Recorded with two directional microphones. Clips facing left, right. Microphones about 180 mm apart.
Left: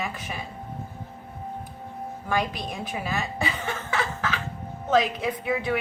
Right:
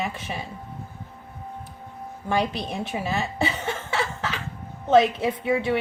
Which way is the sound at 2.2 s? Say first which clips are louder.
Right 3 dB; 25° right (ahead or behind).